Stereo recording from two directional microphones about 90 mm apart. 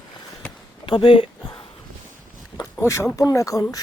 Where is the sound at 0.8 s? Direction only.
65° left (ahead or behind).